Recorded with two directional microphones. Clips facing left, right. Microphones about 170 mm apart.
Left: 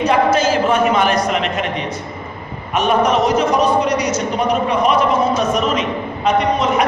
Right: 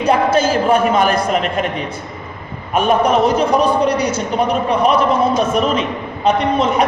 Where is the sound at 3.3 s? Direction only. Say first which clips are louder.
Right 1 dB; 30° right (ahead or behind).